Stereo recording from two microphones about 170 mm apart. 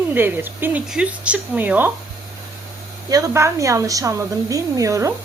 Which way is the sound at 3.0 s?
20° right (ahead or behind).